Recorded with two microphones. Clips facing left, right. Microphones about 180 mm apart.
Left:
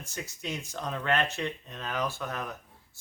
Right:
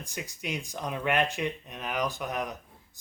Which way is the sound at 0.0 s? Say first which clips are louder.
Right 1 dB; 15° right (ahead or behind).